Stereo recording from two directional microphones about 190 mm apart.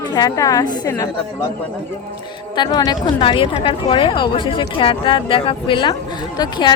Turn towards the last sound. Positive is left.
turn(degrees=25)  # may be behind; listen again after turning